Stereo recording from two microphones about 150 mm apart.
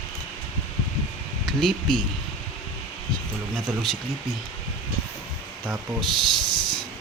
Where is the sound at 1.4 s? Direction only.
Centre (ahead or behind).